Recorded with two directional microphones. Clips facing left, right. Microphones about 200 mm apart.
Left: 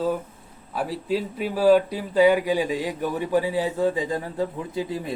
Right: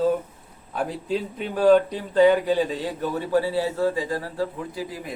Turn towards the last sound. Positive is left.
turn(degrees=25)  # may be behind; listen again after turning